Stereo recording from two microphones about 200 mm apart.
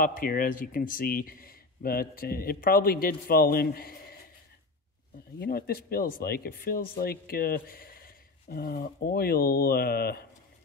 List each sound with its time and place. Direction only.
0.0 s speech: 45° left (ahead or behind)
5.4 s speech: 50° left (ahead or behind)